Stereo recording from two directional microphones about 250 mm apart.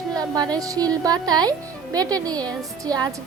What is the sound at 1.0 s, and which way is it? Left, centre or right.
A woman's voice, centre.